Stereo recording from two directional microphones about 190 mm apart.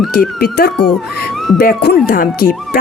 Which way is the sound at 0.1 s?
55° left (ahead or behind).